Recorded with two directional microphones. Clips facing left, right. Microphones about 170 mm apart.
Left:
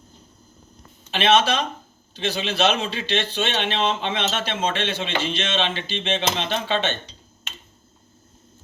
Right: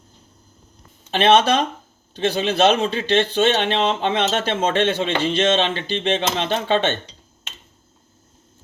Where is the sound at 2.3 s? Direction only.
50° right (ahead or behind).